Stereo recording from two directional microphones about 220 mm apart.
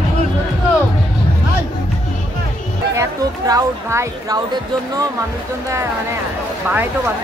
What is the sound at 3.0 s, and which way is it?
Speech, 15° right (ahead or behind).